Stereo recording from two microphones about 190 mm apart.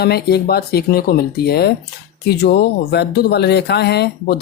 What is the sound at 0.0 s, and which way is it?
Speech, 55° left (ahead or behind).